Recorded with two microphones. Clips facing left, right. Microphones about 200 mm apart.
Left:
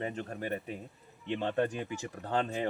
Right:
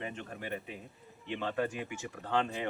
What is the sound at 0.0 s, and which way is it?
A man's voice, 40° left (ahead or behind).